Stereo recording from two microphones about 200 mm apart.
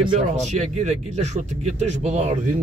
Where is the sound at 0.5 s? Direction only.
35° right (ahead or behind).